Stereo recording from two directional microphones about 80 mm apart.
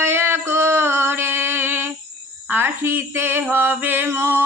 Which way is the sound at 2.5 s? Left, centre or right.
Right.